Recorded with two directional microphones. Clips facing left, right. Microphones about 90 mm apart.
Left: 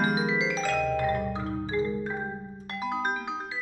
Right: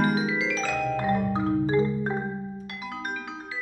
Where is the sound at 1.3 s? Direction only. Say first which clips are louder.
Right 7 dB; 35° right (ahead or behind).